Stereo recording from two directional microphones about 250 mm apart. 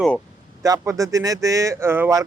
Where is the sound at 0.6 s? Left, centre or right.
Centre.